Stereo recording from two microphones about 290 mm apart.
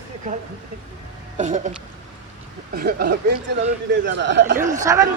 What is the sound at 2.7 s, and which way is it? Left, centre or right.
Speech, right.